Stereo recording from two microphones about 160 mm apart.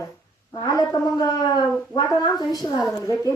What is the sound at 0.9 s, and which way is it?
A woman's voice, 20° left (ahead or behind).